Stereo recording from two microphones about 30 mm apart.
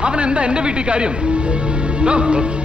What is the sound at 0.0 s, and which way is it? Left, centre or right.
A man's voice, right.